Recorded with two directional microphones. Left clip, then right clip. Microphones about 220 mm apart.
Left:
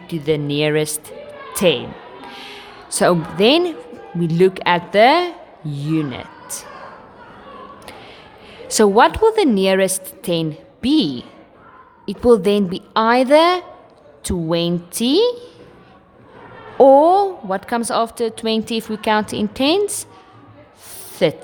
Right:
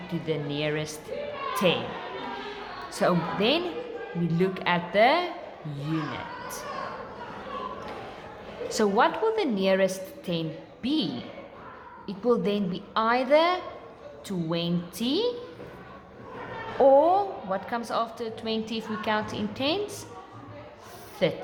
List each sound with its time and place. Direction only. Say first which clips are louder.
0.1 s a woman's voice: left 11 dB; 50° left (ahead or behind)
8.7 s a woman's voice: left 11 dB; 50° left (ahead or behind)
16.7 s a woman's voice: left 9 dB; 45° left (ahead or behind)
21.2 s a woman's voice: left 9 dB; 50° left (ahead or behind)